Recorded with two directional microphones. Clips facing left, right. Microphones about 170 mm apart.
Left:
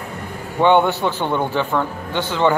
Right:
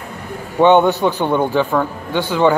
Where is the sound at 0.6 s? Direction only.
20° right (ahead or behind).